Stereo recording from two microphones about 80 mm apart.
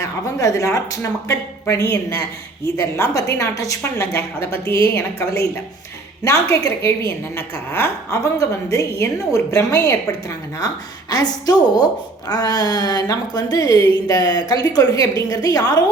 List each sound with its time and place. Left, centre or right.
0.0 s a woman's voice: left
6.2 s a woman's voice: left
8.1 s a woman's voice: left
11.1 s speech: left